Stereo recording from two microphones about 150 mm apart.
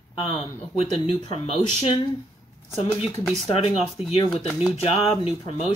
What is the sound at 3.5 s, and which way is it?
Speech, 40° left (ahead or behind).